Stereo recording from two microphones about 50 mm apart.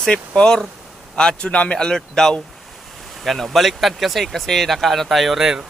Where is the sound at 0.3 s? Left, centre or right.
Centre.